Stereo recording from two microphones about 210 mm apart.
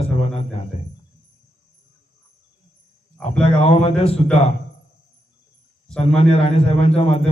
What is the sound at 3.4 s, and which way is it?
Speech, 25° left (ahead or behind).